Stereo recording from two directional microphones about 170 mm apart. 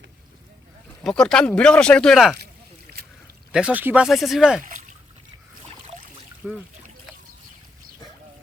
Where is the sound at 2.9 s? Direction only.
65° right (ahead or behind).